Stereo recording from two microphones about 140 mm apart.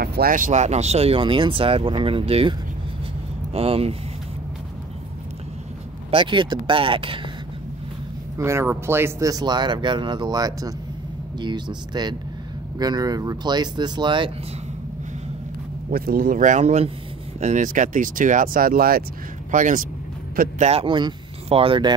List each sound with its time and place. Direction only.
0.2 s speech: 75° right (ahead or behind); by 2.5 s 40° right (ahead or behind)
3.5 s speech: 45° right (ahead or behind)
6.0 s speech: 35° right (ahead or behind)
8.4 s speech: 20° right (ahead or behind); by 14.3 s 35° right (ahead or behind)
15.9 s speech: 90° right
19.5 s speech: 70° right (ahead or behind)
20.3 s speech: 60° right (ahead or behind)
20.8 s speech: 35° right (ahead or behind)